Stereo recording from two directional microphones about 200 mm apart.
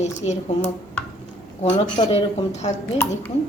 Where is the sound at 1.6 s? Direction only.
30° left (ahead or behind).